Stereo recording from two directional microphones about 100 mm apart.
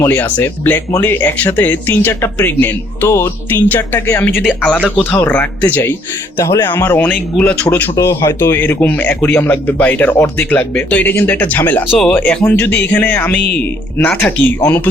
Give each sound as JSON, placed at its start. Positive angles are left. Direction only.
{"t": 0.0, "sound": "speech", "side_deg": 20}
{"t": 7.9, "sound": "speech", "side_deg": 30}